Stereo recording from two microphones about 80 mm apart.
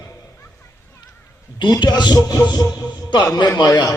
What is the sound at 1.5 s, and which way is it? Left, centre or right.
Speech, left.